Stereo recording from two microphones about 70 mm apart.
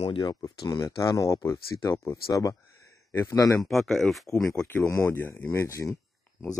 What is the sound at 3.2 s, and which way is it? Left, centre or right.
Speech, left.